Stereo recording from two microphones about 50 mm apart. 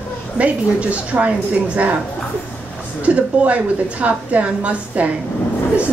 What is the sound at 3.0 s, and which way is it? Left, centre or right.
A woman's voice, right.